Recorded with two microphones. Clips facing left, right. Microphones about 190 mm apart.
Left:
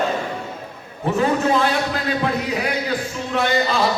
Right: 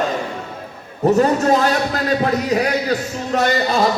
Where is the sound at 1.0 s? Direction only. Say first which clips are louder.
Right 5 dB; 40° right (ahead or behind).